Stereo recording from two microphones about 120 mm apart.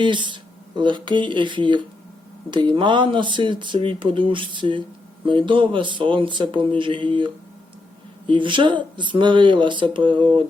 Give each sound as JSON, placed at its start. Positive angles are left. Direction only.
{"t": 0.0, "sound": "speech", "side_deg": -40}
{"t": 8.3, "sound": "speech", "side_deg": -45}